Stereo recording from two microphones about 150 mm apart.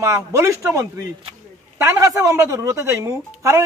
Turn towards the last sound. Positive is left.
turn(degrees=-20)  # may be behind; listen again after turning